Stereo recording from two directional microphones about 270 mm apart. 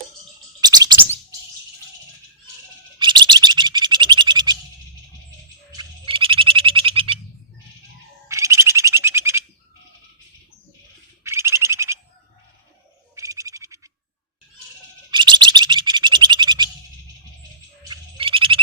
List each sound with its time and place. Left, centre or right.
0.6 s bird: centre
3.0 s bird: centre
5.7 s frog: centre
8.3 s frog: centre
11.2 s bird: centre
13.1 s frog: centre
15.1 s bird: centre
17.8 s frog: centre